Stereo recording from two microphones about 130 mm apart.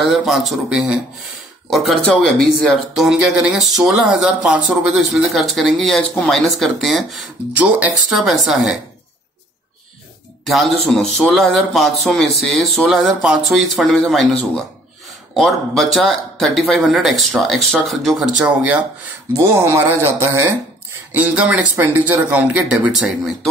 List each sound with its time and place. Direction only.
0.0 s speech: centre (ahead or behind)
7.5 s speech: 10° right (ahead or behind)
8.1 s speech: centre (ahead or behind)
10.4 s speech: centre (ahead or behind)
18.4 s speech: 10° right (ahead or behind)